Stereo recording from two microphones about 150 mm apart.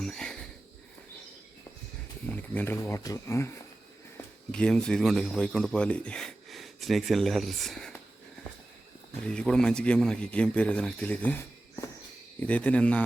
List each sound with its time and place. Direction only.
0.0 s a sound: 5° left (ahead or behind)
2.3 s speech: 10° left (ahead or behind)
4.5 s speech: 5° left (ahead or behind)
9.2 s a man's voice: 5° left (ahead or behind)